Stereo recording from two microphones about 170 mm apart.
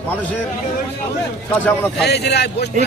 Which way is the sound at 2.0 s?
75° left (ahead or behind).